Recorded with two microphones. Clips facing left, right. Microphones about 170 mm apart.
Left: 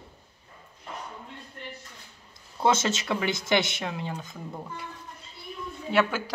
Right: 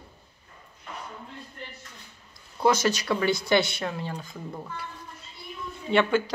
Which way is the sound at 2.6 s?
25° left (ahead or behind).